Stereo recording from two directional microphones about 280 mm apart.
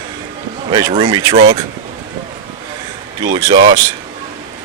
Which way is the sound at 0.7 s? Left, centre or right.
Centre.